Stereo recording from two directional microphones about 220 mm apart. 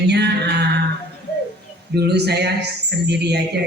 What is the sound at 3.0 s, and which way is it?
Speech, 50° right (ahead or behind).